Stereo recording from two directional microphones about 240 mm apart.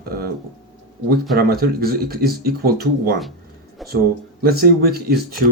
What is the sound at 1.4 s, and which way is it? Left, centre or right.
Speech, right.